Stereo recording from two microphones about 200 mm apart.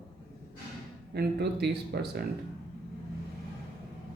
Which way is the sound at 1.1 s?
55° right (ahead or behind).